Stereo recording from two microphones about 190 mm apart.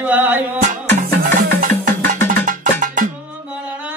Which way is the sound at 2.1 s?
45° right (ahead or behind).